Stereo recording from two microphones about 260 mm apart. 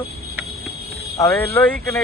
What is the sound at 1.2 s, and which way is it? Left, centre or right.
Speech, centre.